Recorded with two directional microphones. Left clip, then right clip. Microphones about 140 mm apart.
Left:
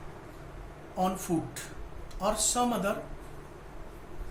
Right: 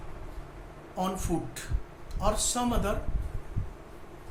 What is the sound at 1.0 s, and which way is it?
Speech, 20° right (ahead or behind).